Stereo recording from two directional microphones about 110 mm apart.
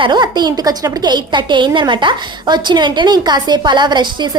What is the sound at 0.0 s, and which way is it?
A woman's voice, 40° right (ahead or behind).